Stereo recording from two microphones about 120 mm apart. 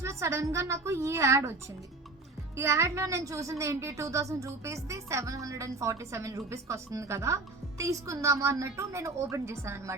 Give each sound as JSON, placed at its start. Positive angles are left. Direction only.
{"t": 0.0, "sound": "a woman's voice", "side_deg": -25}
{"t": 2.6, "sound": "a woman's voice", "side_deg": -20}